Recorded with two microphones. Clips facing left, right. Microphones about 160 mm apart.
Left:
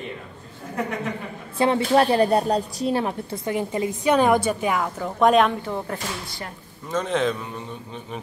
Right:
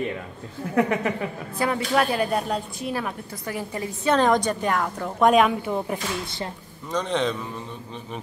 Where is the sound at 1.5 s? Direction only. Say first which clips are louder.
Left 5 dB; 25° left (ahead or behind); by 5.5 s centre (ahead or behind).